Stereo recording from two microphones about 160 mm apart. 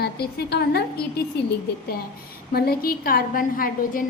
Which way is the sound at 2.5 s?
70° left (ahead or behind).